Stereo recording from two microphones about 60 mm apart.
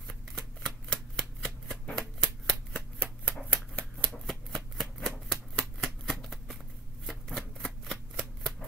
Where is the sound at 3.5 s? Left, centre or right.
Centre.